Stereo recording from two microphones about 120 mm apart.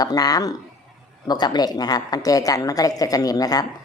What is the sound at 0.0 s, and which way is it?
A woman's voice, 35° left (ahead or behind).